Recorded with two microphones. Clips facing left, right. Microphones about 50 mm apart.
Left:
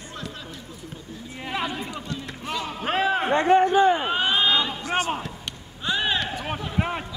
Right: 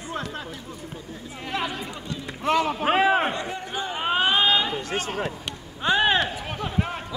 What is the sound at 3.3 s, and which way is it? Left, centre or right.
Speech, left.